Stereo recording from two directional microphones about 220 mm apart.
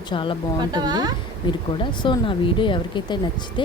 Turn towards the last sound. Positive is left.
turn(degrees=20)  # may be behind; listen again after turning